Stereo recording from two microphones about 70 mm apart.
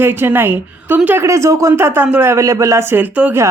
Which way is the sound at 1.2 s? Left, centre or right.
Right.